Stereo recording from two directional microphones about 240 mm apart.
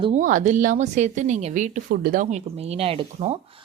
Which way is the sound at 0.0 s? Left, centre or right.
Right.